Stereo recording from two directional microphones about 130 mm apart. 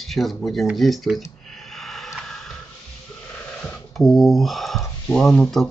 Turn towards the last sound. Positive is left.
turn(degrees=5)  # may be behind; listen again after turning